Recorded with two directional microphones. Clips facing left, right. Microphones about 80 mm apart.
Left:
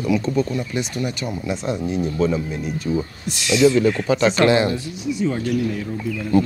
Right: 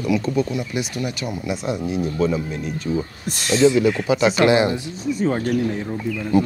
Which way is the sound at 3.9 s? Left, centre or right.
Centre.